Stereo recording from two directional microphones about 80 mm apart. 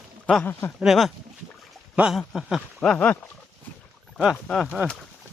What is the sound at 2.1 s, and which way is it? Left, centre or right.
Speech, centre.